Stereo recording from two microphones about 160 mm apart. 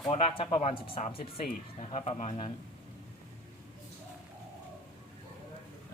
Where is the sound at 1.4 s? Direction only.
50° left (ahead or behind).